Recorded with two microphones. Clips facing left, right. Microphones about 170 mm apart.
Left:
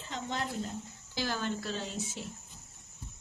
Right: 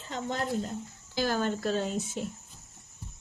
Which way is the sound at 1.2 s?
45° right (ahead or behind).